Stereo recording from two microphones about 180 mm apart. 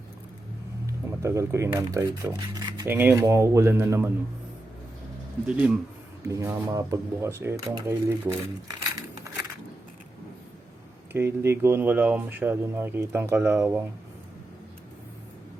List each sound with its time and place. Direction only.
1.2 s speech: 15° right (ahead or behind)
2.8 s speech: 10° right (ahead or behind)
5.5 s speech: 5° right (ahead or behind)
11.1 s speech: 15° right (ahead or behind)